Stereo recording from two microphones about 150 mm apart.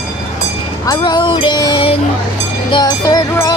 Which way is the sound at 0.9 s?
30° left (ahead or behind).